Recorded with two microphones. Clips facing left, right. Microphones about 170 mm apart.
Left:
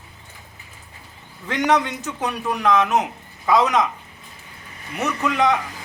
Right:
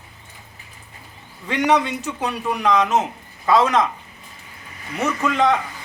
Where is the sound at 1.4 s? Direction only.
15° right (ahead or behind).